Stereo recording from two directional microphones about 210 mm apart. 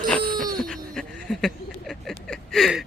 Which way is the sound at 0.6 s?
Centre (ahead or behind).